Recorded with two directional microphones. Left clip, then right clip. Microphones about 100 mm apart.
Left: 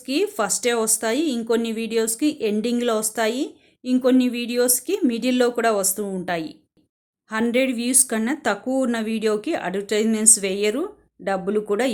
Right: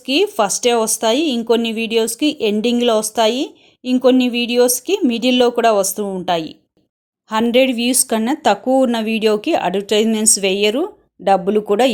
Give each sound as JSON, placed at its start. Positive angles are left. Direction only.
{"t": 0.0, "sound": "speech", "side_deg": -35}